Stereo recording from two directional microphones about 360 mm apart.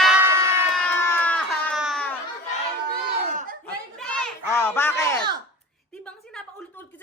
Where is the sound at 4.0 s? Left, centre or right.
Centre.